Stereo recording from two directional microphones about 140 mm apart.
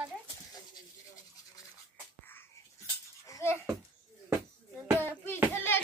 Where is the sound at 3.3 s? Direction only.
20° left (ahead or behind).